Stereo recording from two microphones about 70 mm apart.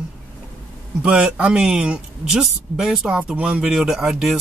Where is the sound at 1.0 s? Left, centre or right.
Centre.